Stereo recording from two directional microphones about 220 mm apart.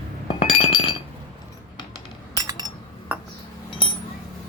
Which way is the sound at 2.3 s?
20° right (ahead or behind).